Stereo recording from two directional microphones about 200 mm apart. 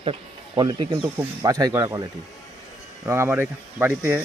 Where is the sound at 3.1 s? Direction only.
10° right (ahead or behind).